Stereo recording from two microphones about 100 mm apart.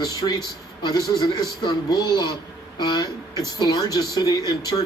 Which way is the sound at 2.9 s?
40° left (ahead or behind).